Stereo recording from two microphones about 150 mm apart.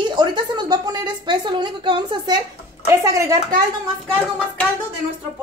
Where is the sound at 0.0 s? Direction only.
30° right (ahead or behind).